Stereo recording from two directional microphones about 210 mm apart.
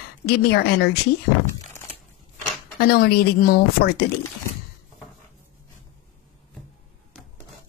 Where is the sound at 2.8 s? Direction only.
50° left (ahead or behind).